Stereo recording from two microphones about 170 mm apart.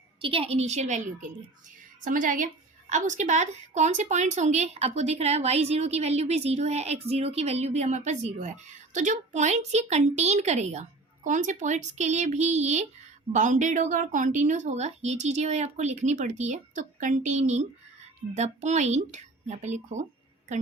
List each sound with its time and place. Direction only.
0.2 s a woman's voice: 30° right (ahead or behind)